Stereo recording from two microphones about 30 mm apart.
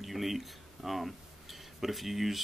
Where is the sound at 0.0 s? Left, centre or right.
Centre.